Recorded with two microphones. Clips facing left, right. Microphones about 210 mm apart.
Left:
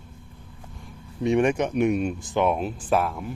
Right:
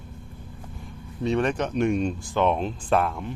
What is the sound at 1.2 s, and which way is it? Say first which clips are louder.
Speech: left 3 dB; 15° left (ahead or behind).